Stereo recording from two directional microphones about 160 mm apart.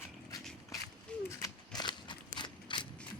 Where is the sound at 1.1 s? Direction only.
5° left (ahead or behind).